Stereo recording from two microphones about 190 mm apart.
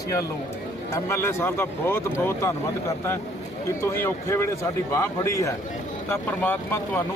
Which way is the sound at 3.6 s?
10° left (ahead or behind).